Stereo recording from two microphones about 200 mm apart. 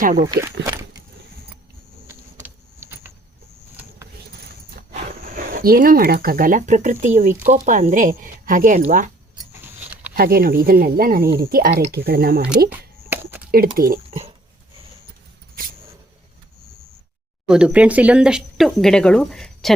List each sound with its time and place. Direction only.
0.2 s speech: 15° right (ahead or behind)
0.6 s a sound: 15° right (ahead or behind)
2.0 s vehicle: 10° right (ahead or behind)
4.7 s speech: 45° right (ahead or behind)
9.5 s vehicle: 10° right (ahead or behind)
10.2 s speech: 45° right (ahead or behind)
12.7 s a sound: 10° right (ahead or behind)
13.5 s speech: 45° right (ahead or behind)
17.5 s speech: 5° right (ahead or behind)